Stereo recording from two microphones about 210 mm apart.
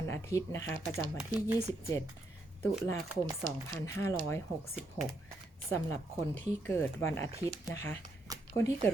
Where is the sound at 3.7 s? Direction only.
15° left (ahead or behind).